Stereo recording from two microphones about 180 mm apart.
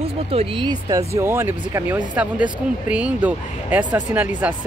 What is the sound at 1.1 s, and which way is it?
Speech, 15° right (ahead or behind).